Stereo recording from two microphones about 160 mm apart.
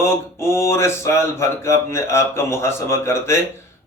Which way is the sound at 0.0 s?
15° left (ahead or behind).